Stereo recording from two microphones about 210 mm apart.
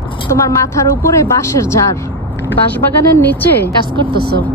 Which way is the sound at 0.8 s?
15° left (ahead or behind).